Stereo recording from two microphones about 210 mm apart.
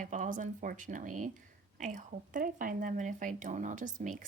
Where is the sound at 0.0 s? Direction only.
35° right (ahead or behind).